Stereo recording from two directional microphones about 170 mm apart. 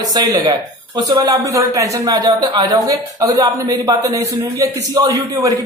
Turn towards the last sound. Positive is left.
turn(degrees=-20)  # may be behind; listen again after turning